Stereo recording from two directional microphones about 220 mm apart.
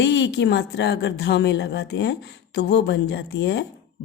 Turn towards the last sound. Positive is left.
turn(degrees=50)  # may be behind; listen again after turning